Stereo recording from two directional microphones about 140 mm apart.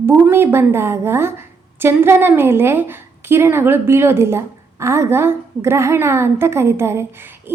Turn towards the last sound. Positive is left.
turn(degrees=-20)  # may be behind; listen again after turning